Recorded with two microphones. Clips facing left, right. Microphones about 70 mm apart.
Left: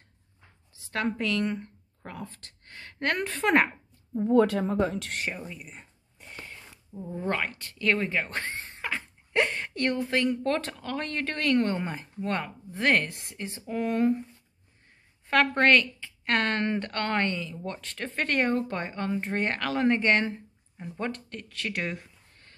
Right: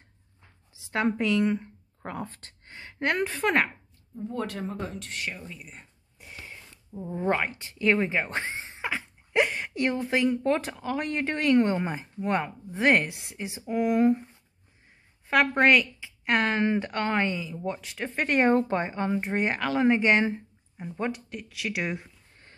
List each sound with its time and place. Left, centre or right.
0.7 s speech: centre
2.0 s speech: right
2.6 s speech: centre
4.1 s speech: left
5.3 s speech: centre
5.6 s speech: centre
15.2 s speech: centre
18.5 s speech: right
18.8 s speech: centre
21.9 s a sound: centre